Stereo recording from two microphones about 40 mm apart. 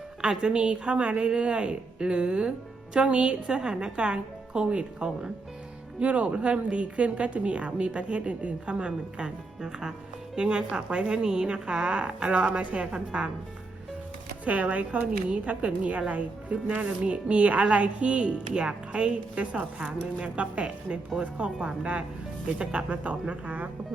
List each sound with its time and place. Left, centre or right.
0.2 s a woman's voice: right
6.0 s speech: right
9.6 s a woman's voice: centre
14.4 s speech: right